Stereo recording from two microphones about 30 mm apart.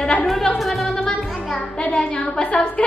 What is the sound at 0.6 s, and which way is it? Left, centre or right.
Music, centre.